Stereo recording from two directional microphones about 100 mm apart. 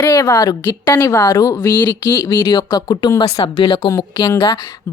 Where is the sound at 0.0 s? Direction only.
35° left (ahead or behind).